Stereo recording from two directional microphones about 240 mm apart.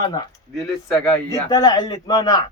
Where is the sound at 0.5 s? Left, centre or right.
Centre.